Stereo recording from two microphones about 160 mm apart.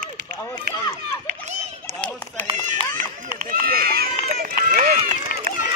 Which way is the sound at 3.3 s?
65° right (ahead or behind).